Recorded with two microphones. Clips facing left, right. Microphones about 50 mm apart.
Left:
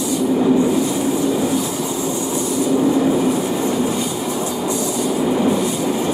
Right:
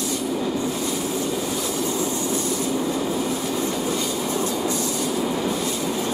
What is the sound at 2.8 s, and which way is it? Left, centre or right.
Train, centre.